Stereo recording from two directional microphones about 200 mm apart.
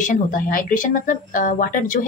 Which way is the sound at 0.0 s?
40° left (ahead or behind).